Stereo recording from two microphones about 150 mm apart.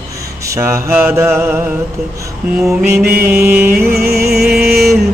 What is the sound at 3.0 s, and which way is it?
Music, 90° right.